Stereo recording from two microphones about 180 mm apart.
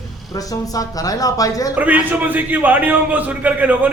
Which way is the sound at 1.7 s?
10° right (ahead or behind).